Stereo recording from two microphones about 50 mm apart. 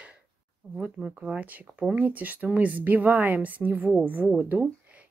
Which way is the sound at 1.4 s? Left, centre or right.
Right.